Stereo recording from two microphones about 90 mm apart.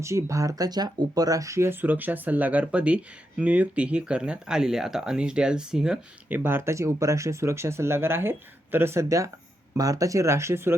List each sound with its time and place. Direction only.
0.0 s speech: 35° right (ahead or behind); by 6.0 s 10° right (ahead or behind)
6.2 s speech: 20° right (ahead or behind)